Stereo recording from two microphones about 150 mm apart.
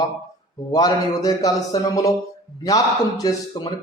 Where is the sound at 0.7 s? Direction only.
25° left (ahead or behind).